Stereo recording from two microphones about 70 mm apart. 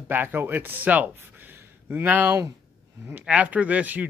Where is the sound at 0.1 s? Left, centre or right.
Right.